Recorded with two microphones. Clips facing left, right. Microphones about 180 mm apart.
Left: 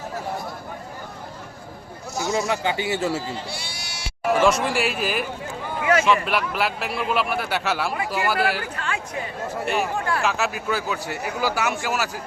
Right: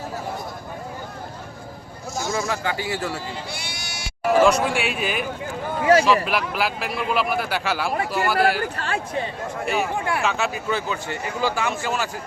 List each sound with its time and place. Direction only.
2.5 s speech: 20° left (ahead or behind)
4.2 s speech: centre (ahead or behind)
5.8 s speech: 35° right (ahead or behind)
6.2 s speech: centre (ahead or behind)
8.7 s speech: 35° right (ahead or behind)
9.6 s speech: centre (ahead or behind)